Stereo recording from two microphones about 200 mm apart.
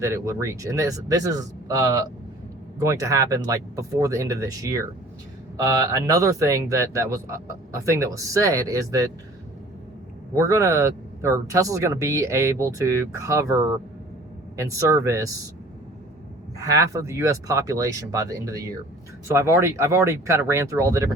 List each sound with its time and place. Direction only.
0.0 s speech: 15° right (ahead or behind)
10.3 s speech: 15° right (ahead or behind)
16.6 s speech: 15° right (ahead or behind)